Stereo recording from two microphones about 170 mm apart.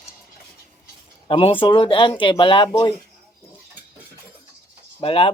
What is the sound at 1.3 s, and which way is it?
Speech, 35° left (ahead or behind).